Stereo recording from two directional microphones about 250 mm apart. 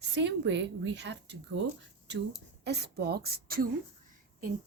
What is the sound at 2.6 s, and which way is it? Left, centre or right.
Speech, right.